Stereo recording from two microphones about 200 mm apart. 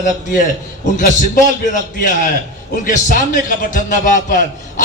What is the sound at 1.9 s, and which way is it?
Speech, 45° left (ahead or behind).